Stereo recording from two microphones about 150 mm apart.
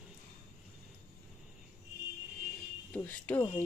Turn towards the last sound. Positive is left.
turn(degrees=10)  # may be behind; listen again after turning